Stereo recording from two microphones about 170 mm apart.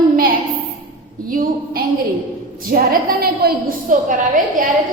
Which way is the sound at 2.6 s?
55° right (ahead or behind).